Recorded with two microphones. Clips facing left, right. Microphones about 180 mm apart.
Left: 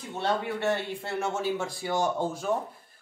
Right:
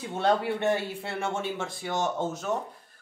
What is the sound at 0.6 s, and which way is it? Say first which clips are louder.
Speech: right 1 dB; 15° right (ahead or behind).